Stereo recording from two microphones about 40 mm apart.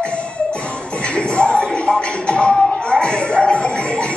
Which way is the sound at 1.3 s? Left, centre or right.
Left.